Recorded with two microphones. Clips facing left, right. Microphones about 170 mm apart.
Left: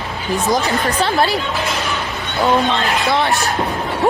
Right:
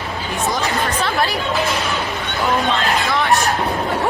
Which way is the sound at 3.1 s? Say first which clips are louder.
Left 3 dB; 35° left (ahead or behind).